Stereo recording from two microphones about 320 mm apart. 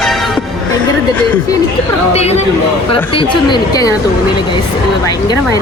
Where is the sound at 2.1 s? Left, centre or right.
Centre.